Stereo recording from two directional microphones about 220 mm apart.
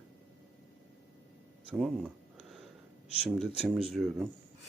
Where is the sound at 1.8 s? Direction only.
Centre (ahead or behind).